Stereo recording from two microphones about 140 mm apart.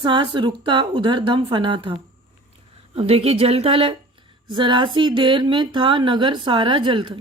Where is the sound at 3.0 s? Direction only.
45° right (ahead or behind).